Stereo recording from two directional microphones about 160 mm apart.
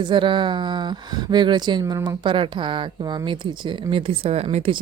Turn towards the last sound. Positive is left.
turn(degrees=-35)  # may be behind; listen again after turning